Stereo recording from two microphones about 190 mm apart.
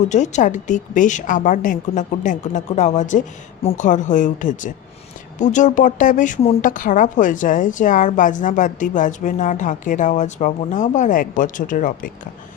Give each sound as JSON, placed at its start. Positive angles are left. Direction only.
{"t": 0.1, "sound": "a woman's voice", "side_deg": 40}